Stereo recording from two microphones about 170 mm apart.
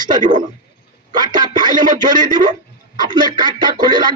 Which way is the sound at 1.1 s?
25° right (ahead or behind).